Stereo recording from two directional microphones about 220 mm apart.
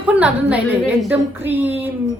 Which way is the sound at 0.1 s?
5° right (ahead or behind).